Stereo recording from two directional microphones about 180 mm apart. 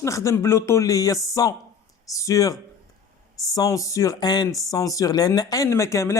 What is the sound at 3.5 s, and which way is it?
Speech, 20° left (ahead or behind).